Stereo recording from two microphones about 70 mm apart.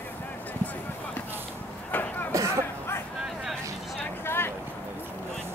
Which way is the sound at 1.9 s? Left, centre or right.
Left.